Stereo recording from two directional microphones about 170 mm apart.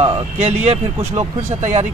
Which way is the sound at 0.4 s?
40° right (ahead or behind).